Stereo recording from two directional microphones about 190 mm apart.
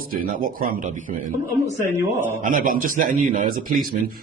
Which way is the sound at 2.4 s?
45° right (ahead or behind).